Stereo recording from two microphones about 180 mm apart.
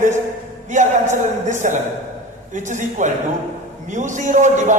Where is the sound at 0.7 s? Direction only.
40° right (ahead or behind).